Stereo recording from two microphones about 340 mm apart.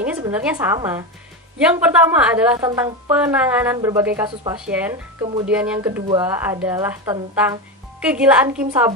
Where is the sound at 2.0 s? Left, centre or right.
Centre.